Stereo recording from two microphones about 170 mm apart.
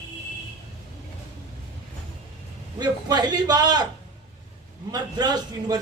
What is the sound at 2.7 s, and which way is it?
A woman's voice, 25° right (ahead or behind).